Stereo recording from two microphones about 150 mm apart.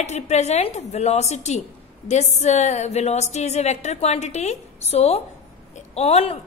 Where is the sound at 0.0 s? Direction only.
50° left (ahead or behind).